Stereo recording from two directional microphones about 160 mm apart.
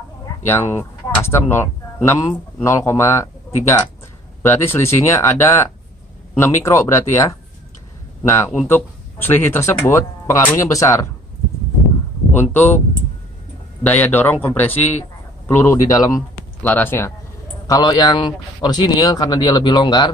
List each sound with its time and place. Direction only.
0.5 s speech: 15° left (ahead or behind)
8.6 s speech: 15° left (ahead or behind)
12.4 s speech: 10° left (ahead or behind)
13.8 s speech: 10° left (ahead or behind)
17.6 s a man's voice: 25° left (ahead or behind)